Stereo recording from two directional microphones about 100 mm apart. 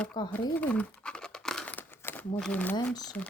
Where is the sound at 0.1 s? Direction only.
50° left (ahead or behind).